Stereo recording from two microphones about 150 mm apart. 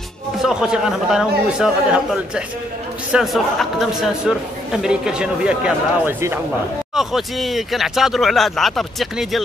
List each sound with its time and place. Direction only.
0.4 s speech: 5° right (ahead or behind)